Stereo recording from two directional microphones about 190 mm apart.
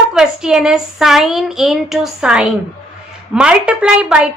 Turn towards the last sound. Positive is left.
turn(degrees=-5)  # may be behind; listen again after turning